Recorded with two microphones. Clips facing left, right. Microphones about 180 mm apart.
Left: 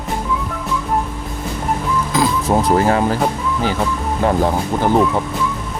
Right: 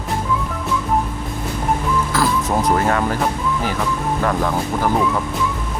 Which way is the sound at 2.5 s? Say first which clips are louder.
Left 3 dB; 30° left (ahead or behind).